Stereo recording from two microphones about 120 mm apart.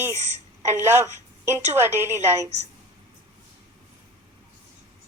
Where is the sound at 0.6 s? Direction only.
20° right (ahead or behind).